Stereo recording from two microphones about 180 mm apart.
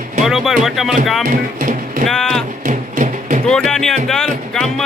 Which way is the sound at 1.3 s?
50° right (ahead or behind).